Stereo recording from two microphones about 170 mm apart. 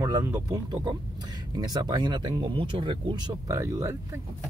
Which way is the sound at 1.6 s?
20° right (ahead or behind).